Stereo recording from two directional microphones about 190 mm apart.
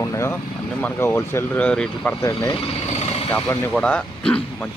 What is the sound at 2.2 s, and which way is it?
Speech, 20° left (ahead or behind).